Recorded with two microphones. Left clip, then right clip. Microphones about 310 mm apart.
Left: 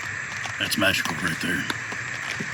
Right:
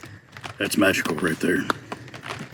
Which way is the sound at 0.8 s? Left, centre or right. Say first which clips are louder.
Right 3 dB; centre.